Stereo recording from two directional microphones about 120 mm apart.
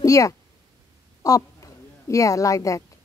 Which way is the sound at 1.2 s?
30° left (ahead or behind).